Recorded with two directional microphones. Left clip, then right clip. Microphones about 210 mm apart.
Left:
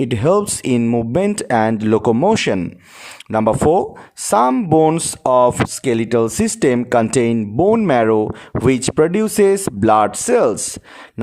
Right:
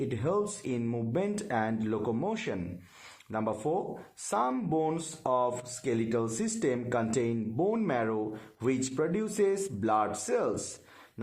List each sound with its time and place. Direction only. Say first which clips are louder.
0.1 s speech: left 15 dB; 45° left (ahead or behind)